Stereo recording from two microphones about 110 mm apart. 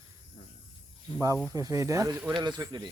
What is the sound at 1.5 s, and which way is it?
Speech, 30° right (ahead or behind).